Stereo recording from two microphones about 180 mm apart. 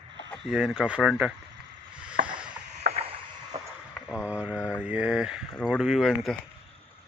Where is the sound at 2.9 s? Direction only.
35° right (ahead or behind).